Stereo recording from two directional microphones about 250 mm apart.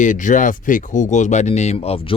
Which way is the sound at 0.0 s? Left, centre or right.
Left.